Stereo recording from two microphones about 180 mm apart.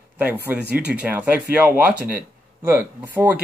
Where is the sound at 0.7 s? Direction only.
10° right (ahead or behind).